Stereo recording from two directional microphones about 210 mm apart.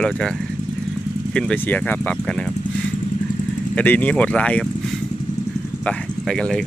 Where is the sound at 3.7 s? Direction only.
5° left (ahead or behind).